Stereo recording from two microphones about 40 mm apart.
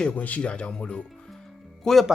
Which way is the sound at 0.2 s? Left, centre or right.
Left.